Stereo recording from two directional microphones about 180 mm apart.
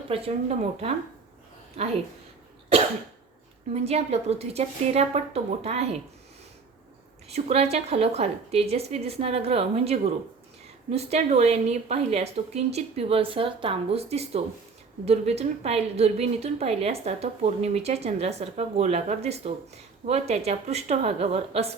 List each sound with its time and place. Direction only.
0.1 s a woman's voice: 35° right (ahead or behind)
3.8 s a woman's voice: 35° right (ahead or behind)
7.3 s a woman's voice: 35° right (ahead or behind)